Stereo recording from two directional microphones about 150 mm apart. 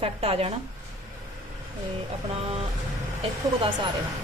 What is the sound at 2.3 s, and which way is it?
Speech, 40° right (ahead or behind).